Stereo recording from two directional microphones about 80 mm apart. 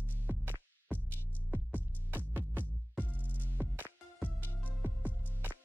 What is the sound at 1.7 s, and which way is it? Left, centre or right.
Music, right.